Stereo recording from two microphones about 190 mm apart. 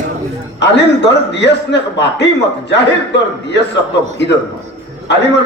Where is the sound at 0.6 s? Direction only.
65° left (ahead or behind).